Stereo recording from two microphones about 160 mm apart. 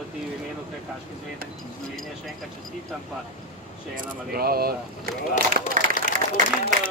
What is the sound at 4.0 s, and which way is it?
Speech, 70° right (ahead or behind).